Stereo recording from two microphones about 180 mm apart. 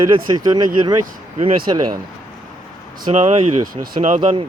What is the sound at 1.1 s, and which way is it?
Speech, 35° right (ahead or behind).